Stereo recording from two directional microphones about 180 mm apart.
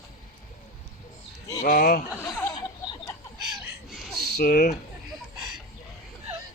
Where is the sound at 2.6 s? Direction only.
25° left (ahead or behind).